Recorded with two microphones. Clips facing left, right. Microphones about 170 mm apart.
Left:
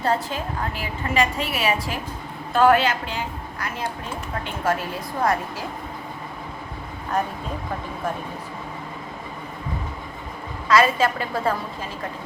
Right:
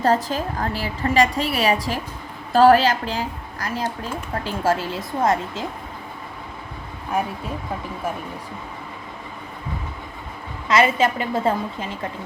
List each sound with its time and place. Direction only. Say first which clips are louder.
0.0 s a woman's voice: right 4 dB; 40° right (ahead or behind); by 5.6 s 25° right (ahead or behind)
10.7 s speech: even; 20° right (ahead or behind)